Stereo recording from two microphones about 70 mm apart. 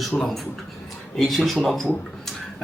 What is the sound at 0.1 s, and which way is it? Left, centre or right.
Speech, left.